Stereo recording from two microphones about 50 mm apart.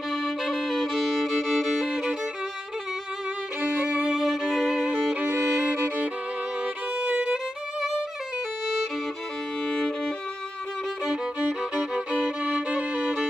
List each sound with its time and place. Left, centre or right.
0.1 s music: centre
3.6 s violin: right
4.2 s violin: centre
4.8 s music: right
7.0 s violin: right
9.7 s violin: centre
12.1 s violin: right